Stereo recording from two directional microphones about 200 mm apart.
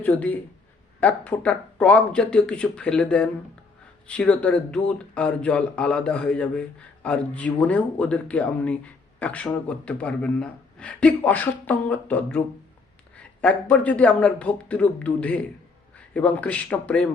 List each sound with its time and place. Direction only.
0.0 s speech: 10° left (ahead or behind)